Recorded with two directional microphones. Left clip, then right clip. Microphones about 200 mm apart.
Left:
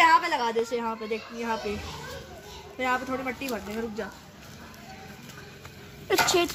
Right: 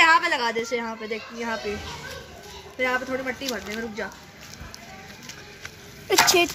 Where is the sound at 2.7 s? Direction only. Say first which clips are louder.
Right 3 dB; 25° left (ahead or behind).